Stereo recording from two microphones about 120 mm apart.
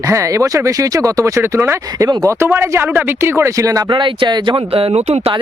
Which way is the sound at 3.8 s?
40° right (ahead or behind).